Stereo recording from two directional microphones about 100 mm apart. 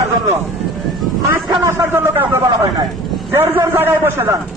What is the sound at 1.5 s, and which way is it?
Speech, 30° right (ahead or behind).